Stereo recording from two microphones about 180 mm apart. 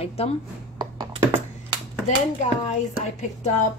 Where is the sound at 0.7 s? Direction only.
25° right (ahead or behind).